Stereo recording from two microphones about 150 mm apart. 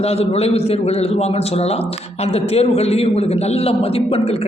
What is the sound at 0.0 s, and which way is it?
A man's voice, 40° left (ahead or behind).